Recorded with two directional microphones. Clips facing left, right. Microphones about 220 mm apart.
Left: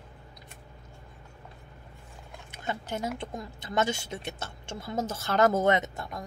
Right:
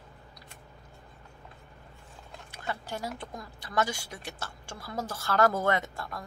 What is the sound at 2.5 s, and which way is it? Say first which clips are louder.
Speech: left 3 dB; 20° left (ahead or behind).